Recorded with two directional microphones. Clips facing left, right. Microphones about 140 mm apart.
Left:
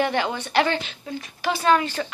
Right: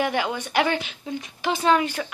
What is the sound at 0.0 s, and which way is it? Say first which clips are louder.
A woman's voice: left 1 dB; 10° right (ahead or behind).